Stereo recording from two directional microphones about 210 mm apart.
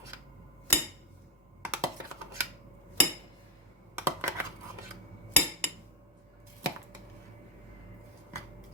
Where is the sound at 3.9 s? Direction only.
10° right (ahead or behind).